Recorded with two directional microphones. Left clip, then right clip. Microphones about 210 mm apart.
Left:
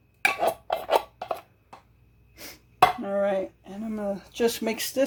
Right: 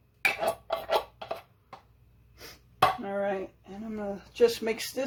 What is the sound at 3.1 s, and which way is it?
Dishes, 40° left (ahead or behind).